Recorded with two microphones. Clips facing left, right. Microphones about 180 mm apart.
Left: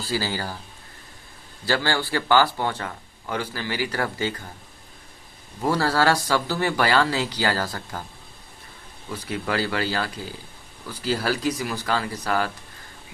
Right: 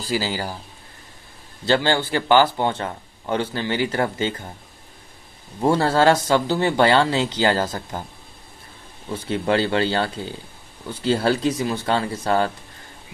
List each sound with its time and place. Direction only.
0.0 s speech: 15° right (ahead or behind)
1.6 s speech: 20° right (ahead or behind)
5.6 s speech: 25° right (ahead or behind)
9.0 s speech: 25° right (ahead or behind)